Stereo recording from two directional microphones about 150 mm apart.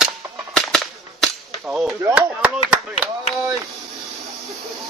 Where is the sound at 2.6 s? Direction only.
45° left (ahead or behind).